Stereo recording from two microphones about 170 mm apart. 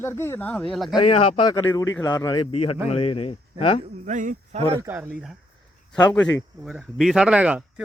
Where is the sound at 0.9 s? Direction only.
35° left (ahead or behind).